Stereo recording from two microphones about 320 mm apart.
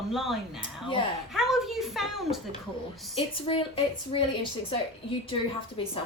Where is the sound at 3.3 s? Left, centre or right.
Centre.